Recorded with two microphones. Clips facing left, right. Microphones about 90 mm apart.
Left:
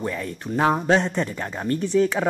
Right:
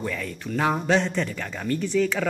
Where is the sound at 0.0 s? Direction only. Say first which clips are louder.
Left 2 dB; 25° left (ahead or behind).